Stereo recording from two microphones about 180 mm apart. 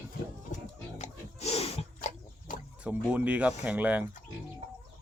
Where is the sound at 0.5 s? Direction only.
40° left (ahead or behind).